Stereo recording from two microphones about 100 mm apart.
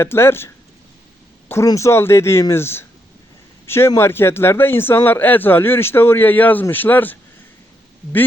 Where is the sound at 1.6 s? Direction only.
30° left (ahead or behind).